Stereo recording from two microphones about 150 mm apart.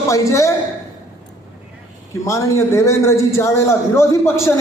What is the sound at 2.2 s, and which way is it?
A man's voice, 20° left (ahead or behind).